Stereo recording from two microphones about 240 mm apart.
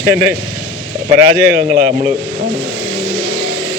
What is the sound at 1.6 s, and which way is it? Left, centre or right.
Speech, right.